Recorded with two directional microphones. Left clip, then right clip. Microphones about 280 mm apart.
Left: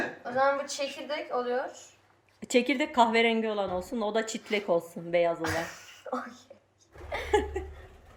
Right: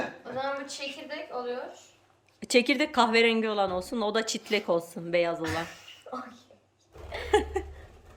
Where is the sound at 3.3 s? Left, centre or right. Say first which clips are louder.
Right 2 dB; centre.